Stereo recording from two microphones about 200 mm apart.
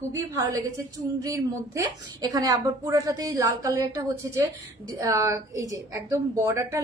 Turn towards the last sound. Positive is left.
turn(degrees=-15)  # may be behind; listen again after turning